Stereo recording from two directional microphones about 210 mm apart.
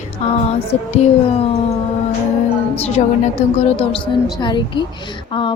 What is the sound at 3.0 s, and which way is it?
Speech, 30° left (ahead or behind).